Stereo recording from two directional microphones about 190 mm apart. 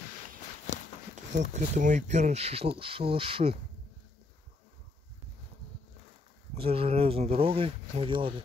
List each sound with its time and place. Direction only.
0.7 s a sound: 40° left (ahead or behind)
1.4 s speech: 40° right (ahead or behind)
6.5 s speech: 30° right (ahead or behind)